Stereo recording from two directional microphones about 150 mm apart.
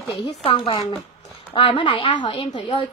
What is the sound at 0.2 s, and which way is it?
Speech, 45° left (ahead or behind).